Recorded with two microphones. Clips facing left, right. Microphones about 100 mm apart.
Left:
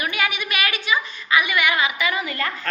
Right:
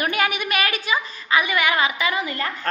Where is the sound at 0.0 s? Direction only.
45° right (ahead or behind).